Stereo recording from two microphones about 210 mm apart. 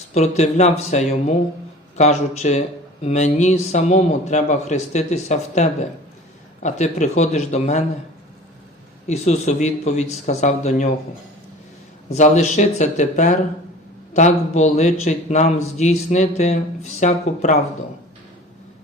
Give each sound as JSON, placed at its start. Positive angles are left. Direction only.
{"t": 0.1, "sound": "speech", "side_deg": 35}
{"t": 9.0, "sound": "speech", "side_deg": 30}
{"t": 12.1, "sound": "speech", "side_deg": 35}